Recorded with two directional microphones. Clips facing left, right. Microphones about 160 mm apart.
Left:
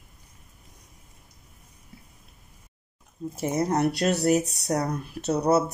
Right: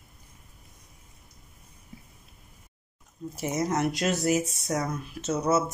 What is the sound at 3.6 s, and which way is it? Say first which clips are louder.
Speech: left 3 dB; 35° left (ahead or behind).